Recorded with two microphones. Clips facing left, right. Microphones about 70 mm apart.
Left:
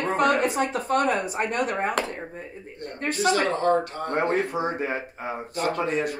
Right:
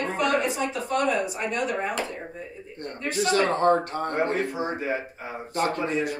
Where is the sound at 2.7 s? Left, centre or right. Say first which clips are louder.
Right 1 dB; right.